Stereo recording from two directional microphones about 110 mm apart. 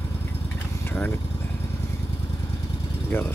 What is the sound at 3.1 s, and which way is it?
Speech, 20° left (ahead or behind).